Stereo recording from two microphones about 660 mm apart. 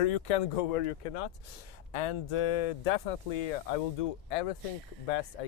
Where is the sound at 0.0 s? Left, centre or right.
Left.